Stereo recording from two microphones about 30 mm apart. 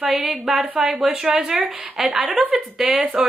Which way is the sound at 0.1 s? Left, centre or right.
Centre.